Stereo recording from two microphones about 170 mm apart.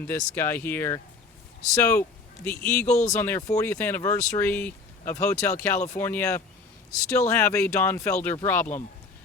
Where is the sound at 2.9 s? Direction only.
45° left (ahead or behind).